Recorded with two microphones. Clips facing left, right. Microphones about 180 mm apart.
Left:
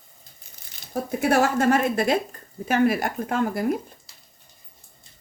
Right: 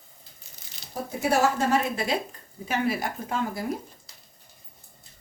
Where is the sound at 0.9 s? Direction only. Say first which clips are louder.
Left 4 dB; 55° left (ahead or behind).